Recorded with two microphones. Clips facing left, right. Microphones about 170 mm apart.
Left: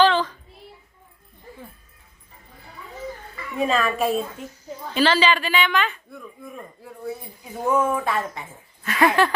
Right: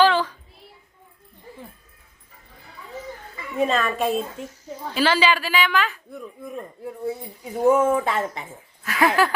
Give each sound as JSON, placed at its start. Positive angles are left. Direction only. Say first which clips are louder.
{"t": 0.0, "sound": "child singing", "louder": "even", "side_deg": -10}
{"t": 3.6, "sound": "a woman's voice", "louder": "even", "side_deg": 0}
{"t": 4.9, "sound": "a woman's voice", "louder": "left 1 dB", "side_deg": -10}
{"t": 6.1, "sound": "a woman's voice", "louder": "right 4 dB", "side_deg": -20}
{"t": 7.8, "sound": "speech", "louder": "right 2 dB", "side_deg": -20}
{"t": 8.8, "sound": "a woman's voice", "louder": "left 1 dB", "side_deg": 0}